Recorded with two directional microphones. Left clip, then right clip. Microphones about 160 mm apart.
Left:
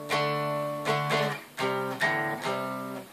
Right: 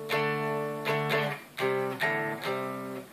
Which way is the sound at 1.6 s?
25° right (ahead or behind).